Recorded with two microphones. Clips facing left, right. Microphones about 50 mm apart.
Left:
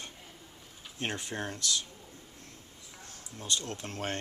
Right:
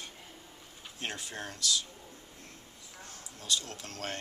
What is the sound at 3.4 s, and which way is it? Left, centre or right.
Speech, left.